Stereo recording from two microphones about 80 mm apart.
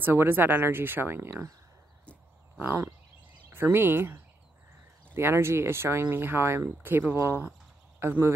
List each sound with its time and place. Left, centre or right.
0.0 s speech: right
2.6 s speech: right